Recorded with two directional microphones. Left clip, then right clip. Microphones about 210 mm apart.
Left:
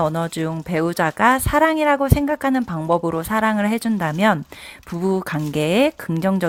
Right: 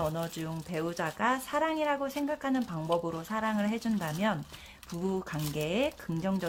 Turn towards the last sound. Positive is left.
turn(degrees=40)  # may be behind; listen again after turning